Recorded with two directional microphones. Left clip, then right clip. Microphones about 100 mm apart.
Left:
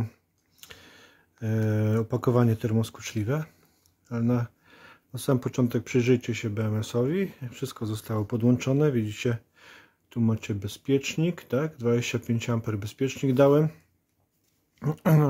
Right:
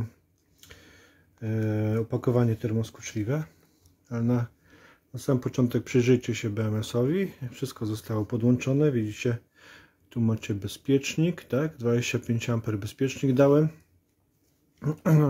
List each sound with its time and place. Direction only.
0.6 s speech: 40° left (ahead or behind); by 3.3 s 60° left (ahead or behind)
3.3 s speech: 35° left (ahead or behind)
4.1 s speech: 15° left (ahead or behind)
4.6 s speech: 35° left (ahead or behind)
14.8 s speech: 40° left (ahead or behind)